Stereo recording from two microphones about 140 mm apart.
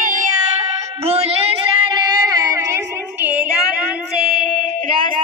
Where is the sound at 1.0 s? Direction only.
45° right (ahead or behind).